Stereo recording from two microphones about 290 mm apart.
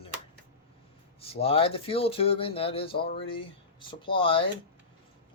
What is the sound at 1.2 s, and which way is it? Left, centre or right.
Speech, centre.